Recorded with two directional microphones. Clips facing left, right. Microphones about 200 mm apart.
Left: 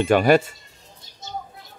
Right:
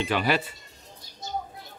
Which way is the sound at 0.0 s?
50° left (ahead or behind).